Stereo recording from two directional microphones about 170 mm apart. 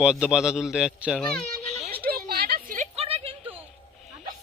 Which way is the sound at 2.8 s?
35° right (ahead or behind).